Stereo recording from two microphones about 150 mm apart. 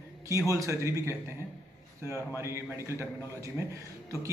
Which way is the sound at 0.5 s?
20° right (ahead or behind).